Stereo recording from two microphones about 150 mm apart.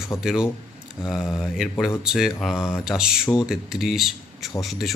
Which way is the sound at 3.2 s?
15° left (ahead or behind).